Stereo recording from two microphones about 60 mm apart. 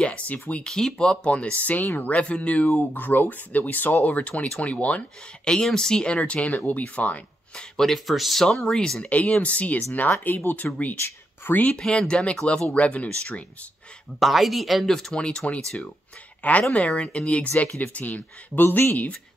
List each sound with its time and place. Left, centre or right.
0.0 s speech: left
0.7 s speech: centre
5.5 s speech: centre
7.7 s speech: centre
9.0 s speech: left
11.7 s speech: centre
14.2 s speech: centre
16.7 s speech: centre; by 19.0 s left